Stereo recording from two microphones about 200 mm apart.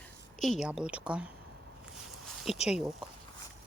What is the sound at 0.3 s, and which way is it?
Speech, centre (ahead or behind).